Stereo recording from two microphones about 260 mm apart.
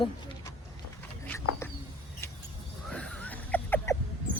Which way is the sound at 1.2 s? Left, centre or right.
Centre.